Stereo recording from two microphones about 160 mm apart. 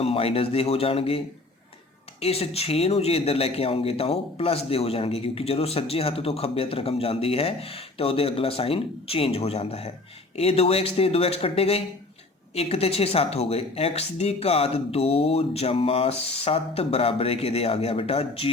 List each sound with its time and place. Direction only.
0.0 s a man's voice: 35° left (ahead or behind)
2.2 s a man's voice: 40° left (ahead or behind)